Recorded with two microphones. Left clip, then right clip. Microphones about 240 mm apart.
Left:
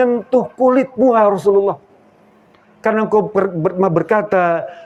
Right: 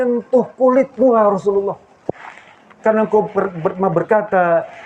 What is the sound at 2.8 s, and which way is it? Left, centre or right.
A man's voice, left.